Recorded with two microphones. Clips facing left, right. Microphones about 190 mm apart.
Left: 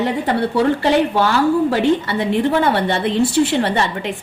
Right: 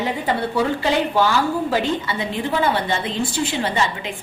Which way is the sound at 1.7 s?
65° left (ahead or behind).